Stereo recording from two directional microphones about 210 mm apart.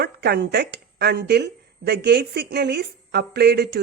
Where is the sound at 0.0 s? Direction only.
50° right (ahead or behind).